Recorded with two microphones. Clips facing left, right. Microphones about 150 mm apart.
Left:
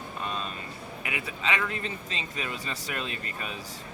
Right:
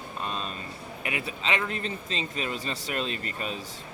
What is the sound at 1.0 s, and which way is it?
Speech, 30° right (ahead or behind).